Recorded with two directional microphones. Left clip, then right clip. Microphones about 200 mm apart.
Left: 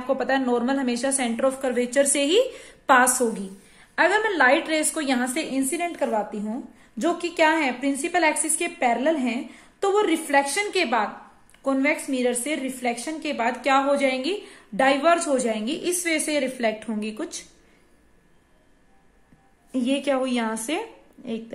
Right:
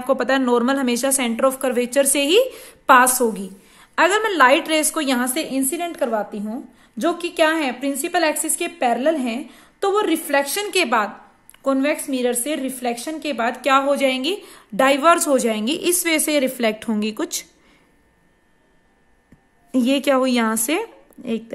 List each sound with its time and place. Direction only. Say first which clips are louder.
0.0 s a woman's voice: right 4 dB; 55° right (ahead or behind)
19.7 s a woman's voice: right 6 dB; 55° right (ahead or behind)